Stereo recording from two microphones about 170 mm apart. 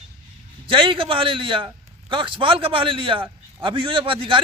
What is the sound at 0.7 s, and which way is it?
A man's voice, 30° right (ahead or behind).